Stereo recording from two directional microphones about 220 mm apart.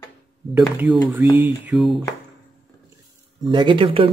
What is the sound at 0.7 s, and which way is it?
Speech, 10° right (ahead or behind).